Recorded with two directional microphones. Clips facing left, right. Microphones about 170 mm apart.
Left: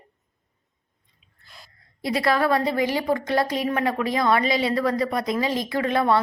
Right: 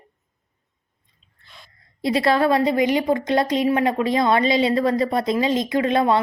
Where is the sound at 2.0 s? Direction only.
25° right (ahead or behind).